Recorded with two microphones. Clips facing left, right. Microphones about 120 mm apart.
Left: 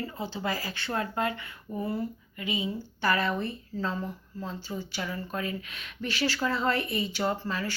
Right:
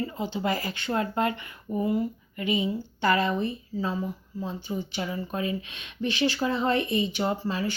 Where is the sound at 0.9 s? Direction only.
30° right (ahead or behind).